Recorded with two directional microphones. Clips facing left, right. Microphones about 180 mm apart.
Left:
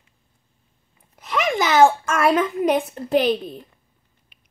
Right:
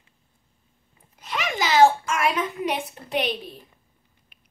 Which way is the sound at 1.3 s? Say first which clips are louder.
Left 4 dB; 55° left (ahead or behind).